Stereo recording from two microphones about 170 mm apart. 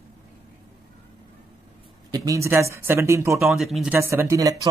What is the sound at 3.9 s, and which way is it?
Speech, 15° right (ahead or behind).